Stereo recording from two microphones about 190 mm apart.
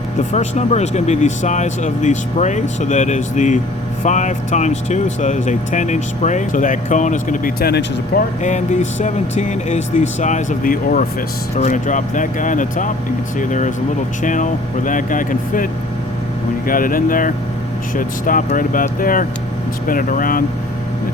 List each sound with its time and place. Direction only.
0.3 s speech: 35° left (ahead or behind); by 8.2 s 55° left (ahead or behind)
8.4 s speech: 40° left (ahead or behind)
16.6 s speech: 45° left (ahead or behind)